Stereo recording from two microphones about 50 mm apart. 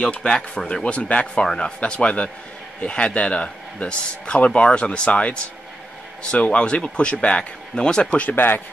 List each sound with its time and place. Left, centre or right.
0.2 s speech: centre
0.8 s a man's voice: left